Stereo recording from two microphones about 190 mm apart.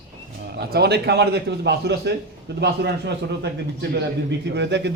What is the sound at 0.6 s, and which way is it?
A man's voice, 60° right (ahead or behind).